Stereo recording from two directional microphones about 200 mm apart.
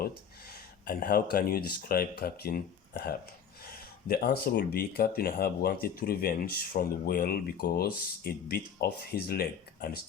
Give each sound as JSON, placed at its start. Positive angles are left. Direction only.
{"t": 0.4, "sound": "speech", "side_deg": 50}